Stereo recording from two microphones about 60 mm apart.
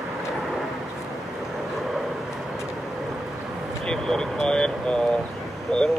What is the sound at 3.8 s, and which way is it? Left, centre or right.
Vehicle, centre.